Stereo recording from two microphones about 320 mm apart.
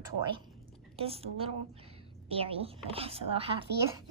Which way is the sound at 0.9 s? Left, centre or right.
Centre.